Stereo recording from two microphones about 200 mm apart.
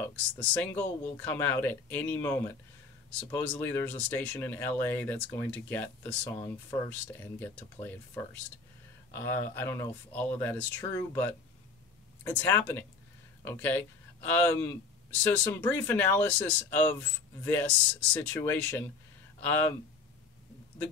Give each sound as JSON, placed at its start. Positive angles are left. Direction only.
{"t": 0.0, "sound": "speech", "side_deg": 5}